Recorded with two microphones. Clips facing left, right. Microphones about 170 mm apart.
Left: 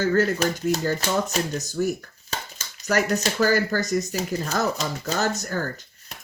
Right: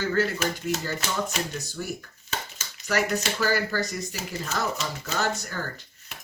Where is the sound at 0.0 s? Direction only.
45° left (ahead or behind).